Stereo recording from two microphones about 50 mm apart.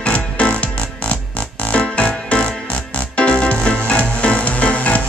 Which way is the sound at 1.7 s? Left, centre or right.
Left.